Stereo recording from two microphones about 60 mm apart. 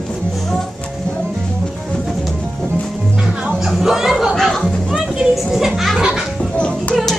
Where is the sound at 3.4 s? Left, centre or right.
Centre.